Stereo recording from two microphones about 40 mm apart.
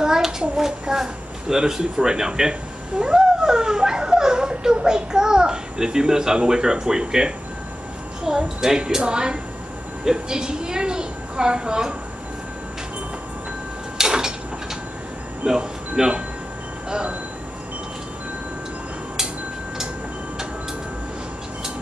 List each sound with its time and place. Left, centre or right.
0.0 s a child's voice: centre
13.9 s a sound: centre
15.4 s a woman's voice: centre
16.9 s a woman's voice: right